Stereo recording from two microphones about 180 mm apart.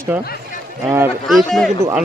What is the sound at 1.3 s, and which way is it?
Speech, centre (ahead or behind).